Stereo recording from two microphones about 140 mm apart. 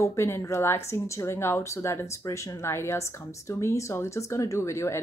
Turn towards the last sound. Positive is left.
turn(degrees=20)  # may be behind; listen again after turning